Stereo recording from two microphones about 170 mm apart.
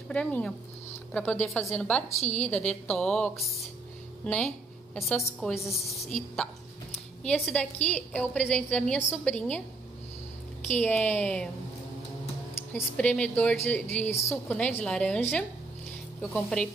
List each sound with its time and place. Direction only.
0.1 s a woman's voice: 5° left (ahead or behind)
2.1 s a woman's voice: 40° left (ahead or behind)
2.7 s a woman's voice: 5° left (ahead or behind)
7.2 s a woman's voice: 5° left (ahead or behind)
10.8 s a woman's voice: 10° left (ahead or behind)
12.7 s a woman's voice: 5° left (ahead or behind)